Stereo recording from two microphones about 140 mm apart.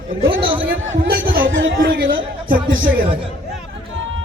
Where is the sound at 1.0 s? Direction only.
90° right.